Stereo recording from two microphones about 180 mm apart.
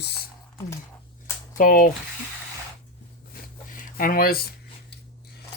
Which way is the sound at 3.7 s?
50° left (ahead or behind).